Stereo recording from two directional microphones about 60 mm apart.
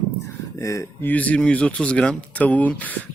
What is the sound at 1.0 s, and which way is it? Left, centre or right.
Speech, left.